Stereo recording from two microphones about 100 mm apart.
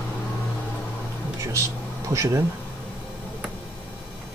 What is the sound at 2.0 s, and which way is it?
Speech, 30° right (ahead or behind).